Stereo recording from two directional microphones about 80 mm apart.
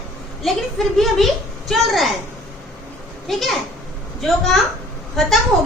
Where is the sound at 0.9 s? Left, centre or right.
Centre.